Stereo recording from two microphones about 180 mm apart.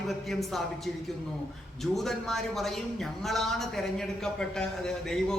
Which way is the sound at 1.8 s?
Centre (ahead or behind).